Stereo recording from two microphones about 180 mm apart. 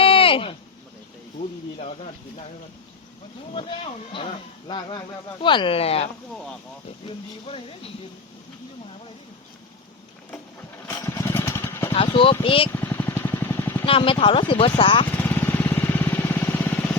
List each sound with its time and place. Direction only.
0.0 s a sound: 30° left (ahead or behind)
3.5 s speech: 30° left (ahead or behind)
11.0 s vehicle: 15° left (ahead or behind)
11.9 s speech: 30° left (ahead or behind)
12.7 s vehicle: 10° left (ahead or behind)
13.8 s speech: 30° left (ahead or behind)
15.2 s vehicle: 10° left (ahead or behind)